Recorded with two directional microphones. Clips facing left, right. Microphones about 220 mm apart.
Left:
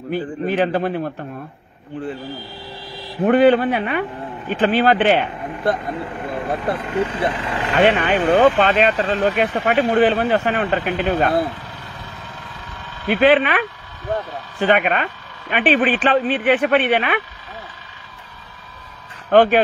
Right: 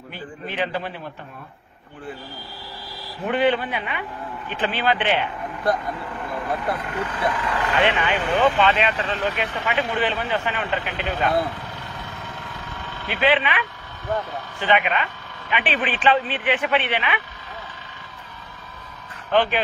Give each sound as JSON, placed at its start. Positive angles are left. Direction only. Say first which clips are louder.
{"t": 0.1, "sound": "speech", "louder": "left 12 dB", "side_deg": 45}
{"t": 3.3, "sound": "speech", "louder": "left 8 dB", "side_deg": 45}
{"t": 5.6, "sound": "speech", "louder": "left 2 dB", "side_deg": 25}
{"t": 7.7, "sound": "speech", "louder": "left 7 dB", "side_deg": 50}
{"t": 13.1, "sound": "speech", "louder": "left 7 dB", "side_deg": 50}
{"t": 19.3, "sound": "speech", "louder": "left 8 dB", "side_deg": 50}